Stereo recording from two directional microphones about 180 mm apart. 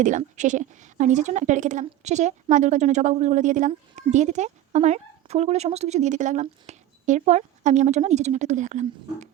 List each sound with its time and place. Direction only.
0.0 s a woman's voice: 45° right (ahead or behind)